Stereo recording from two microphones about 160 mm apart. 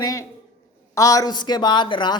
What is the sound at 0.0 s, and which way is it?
Speech, 20° left (ahead or behind).